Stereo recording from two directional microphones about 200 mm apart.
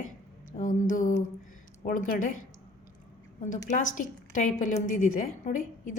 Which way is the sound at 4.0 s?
40° left (ahead or behind).